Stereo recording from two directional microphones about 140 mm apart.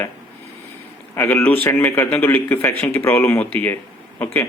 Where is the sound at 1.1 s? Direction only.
15° left (ahead or behind).